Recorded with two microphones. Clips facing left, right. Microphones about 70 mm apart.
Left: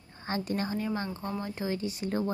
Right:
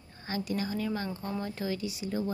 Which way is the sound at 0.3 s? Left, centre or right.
Left.